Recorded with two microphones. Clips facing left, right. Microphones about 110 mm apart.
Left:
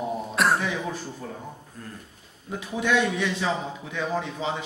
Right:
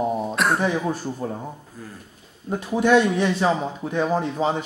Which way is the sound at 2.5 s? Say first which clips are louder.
Right 7 dB; 40° right (ahead or behind).